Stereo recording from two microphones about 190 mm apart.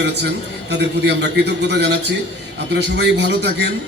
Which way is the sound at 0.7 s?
65° right (ahead or behind).